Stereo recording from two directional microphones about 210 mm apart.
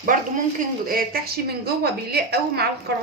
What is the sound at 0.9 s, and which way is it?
A woman's voice, 45° right (ahead or behind).